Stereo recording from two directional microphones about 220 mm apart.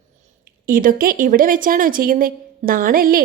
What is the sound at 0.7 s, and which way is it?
Speech, 40° right (ahead or behind).